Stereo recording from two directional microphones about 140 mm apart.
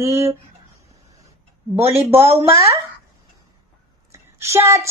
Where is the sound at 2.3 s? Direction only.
20° right (ahead or behind).